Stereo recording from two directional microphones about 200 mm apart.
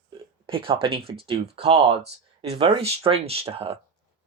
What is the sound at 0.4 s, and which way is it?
Speech, 25° right (ahead or behind).